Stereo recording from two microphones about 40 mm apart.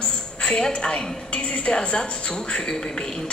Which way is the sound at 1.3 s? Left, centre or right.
Left.